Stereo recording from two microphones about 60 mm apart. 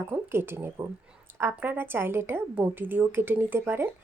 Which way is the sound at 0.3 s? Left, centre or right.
Right.